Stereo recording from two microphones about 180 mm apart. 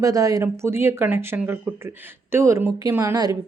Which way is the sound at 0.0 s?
20° right (ahead or behind).